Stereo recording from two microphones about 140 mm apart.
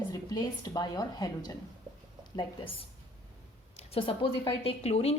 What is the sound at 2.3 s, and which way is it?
A woman's voice, 40° left (ahead or behind).